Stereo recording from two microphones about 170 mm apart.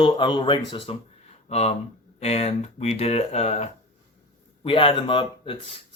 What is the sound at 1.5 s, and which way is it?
Speech, 40° left (ahead or behind).